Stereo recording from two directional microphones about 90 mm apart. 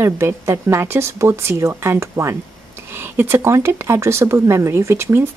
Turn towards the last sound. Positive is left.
turn(degrees=-30)  # may be behind; listen again after turning